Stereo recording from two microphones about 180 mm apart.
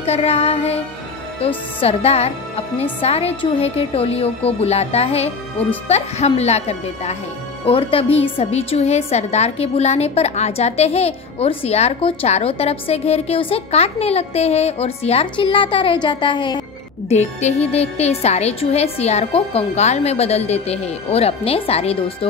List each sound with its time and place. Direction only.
0.0 s a woman's voice: 35° left (ahead or behind)
17.1 s a woman's voice: 40° left (ahead or behind)